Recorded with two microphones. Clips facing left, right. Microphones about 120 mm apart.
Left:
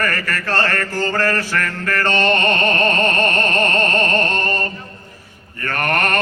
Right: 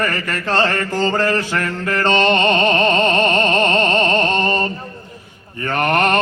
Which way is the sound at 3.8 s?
50° left (ahead or behind).